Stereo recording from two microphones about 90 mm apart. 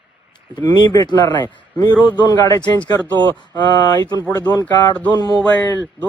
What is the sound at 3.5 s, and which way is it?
Speech, 50° left (ahead or behind).